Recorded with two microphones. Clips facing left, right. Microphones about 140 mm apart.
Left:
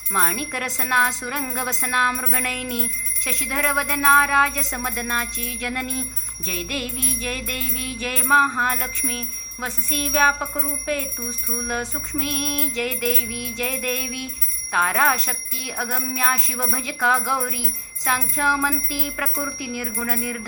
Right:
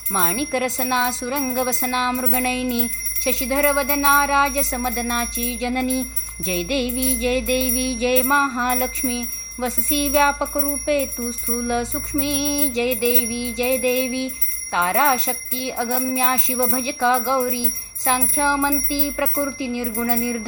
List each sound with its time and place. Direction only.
0.1 s music: 25° right (ahead or behind)